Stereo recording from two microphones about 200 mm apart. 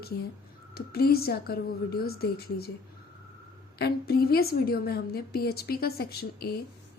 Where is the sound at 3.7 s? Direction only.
50° left (ahead or behind).